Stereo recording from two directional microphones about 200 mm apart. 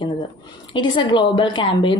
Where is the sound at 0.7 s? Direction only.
25° left (ahead or behind).